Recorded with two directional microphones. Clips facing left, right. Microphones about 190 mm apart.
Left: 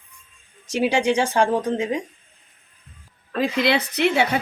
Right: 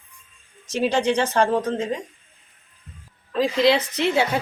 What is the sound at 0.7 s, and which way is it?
A woman's voice, 10° left (ahead or behind).